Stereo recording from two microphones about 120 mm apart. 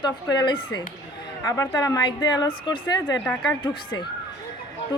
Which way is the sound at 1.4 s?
25° left (ahead or behind).